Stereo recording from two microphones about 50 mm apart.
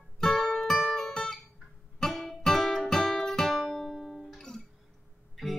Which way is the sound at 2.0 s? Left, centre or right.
Centre.